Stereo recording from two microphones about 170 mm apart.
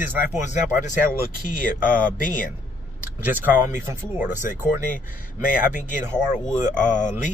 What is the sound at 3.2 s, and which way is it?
Speech, 10° right (ahead or behind).